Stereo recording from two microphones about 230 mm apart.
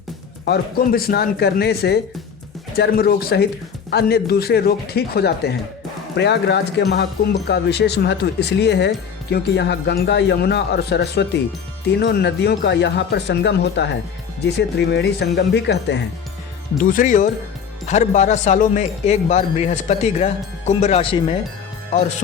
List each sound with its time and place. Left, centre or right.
0.4 s speech: left
16.8 s speech: left